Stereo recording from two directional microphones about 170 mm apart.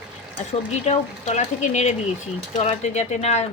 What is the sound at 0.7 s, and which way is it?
Speech, 40° left (ahead or behind).